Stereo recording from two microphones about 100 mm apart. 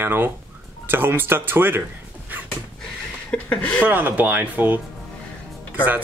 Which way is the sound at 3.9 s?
20° right (ahead or behind).